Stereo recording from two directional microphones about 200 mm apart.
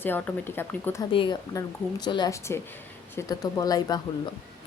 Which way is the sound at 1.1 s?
25° left (ahead or behind).